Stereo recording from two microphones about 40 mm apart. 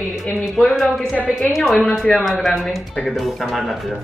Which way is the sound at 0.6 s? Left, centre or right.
Centre.